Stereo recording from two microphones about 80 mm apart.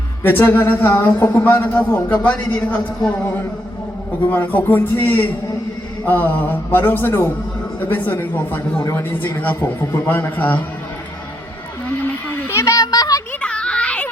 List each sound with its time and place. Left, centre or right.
0.2 s a man's voice: left
2.2 s a man's voice: centre
4.3 s a man's voice: left
8.8 s a man's voice: left
12.5 s a sound: left
12.8 s a sound: left
13.4 s children playing: centre